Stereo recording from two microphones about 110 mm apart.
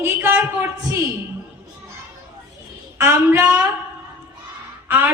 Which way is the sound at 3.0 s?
25° right (ahead or behind).